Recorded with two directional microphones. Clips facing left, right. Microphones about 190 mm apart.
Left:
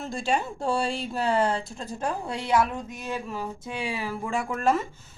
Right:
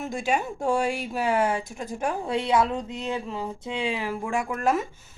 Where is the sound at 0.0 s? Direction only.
15° right (ahead or behind).